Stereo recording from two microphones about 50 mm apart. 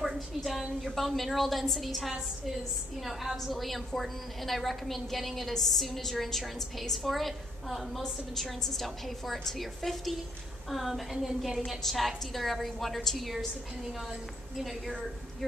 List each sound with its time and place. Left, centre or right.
0.0 s a woman's voice: centre
14.6 s a woman's voice: centre